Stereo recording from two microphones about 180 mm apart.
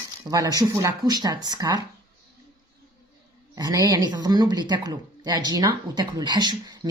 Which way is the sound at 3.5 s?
20° right (ahead or behind).